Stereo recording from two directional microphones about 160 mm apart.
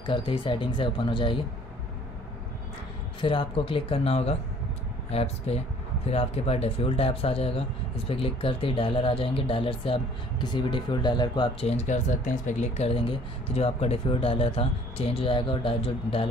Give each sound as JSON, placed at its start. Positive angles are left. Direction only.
{"t": 0.0, "sound": "speech", "side_deg": 30}
{"t": 3.2, "sound": "speech", "side_deg": 35}
{"t": 11.6, "sound": "speech", "side_deg": 45}